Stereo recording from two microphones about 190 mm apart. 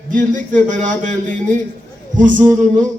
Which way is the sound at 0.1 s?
40° right (ahead or behind).